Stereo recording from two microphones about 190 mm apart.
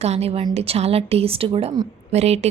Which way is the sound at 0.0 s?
35° right (ahead or behind).